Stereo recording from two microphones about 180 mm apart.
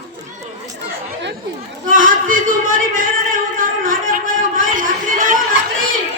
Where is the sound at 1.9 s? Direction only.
50° right (ahead or behind).